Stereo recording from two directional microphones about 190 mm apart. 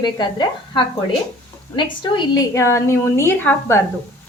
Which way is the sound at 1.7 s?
20° left (ahead or behind).